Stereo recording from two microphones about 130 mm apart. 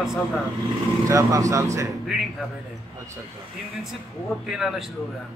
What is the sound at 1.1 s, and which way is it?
Speech, 25° right (ahead or behind).